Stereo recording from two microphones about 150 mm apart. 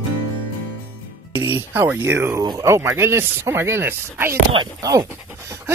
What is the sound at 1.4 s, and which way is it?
Speech, 15° right (ahead or behind).